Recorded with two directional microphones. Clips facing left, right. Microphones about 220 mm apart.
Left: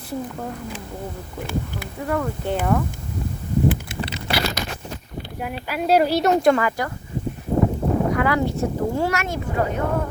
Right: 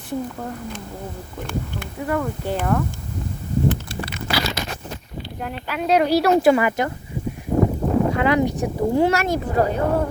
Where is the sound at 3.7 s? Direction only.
20° left (ahead or behind).